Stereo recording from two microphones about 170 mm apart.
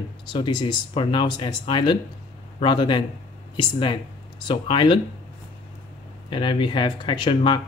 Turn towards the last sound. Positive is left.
turn(degrees=30)  # may be behind; listen again after turning